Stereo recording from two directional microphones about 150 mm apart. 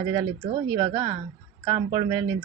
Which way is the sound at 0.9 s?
40° right (ahead or behind).